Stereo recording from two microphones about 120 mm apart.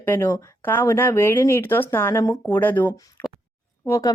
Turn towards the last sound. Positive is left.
turn(degrees=30)  # may be behind; listen again after turning